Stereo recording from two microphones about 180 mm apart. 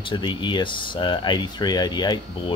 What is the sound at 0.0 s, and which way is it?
Speech, 25° left (ahead or behind).